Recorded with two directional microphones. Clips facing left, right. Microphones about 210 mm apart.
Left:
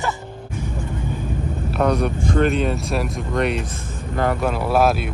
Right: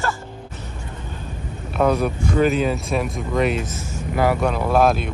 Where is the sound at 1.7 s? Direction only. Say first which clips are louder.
Right 1 dB; 5° right (ahead or behind).